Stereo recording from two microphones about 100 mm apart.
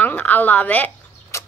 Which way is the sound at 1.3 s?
30° left (ahead or behind).